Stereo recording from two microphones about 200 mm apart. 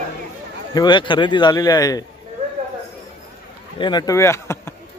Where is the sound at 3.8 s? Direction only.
20° left (ahead or behind).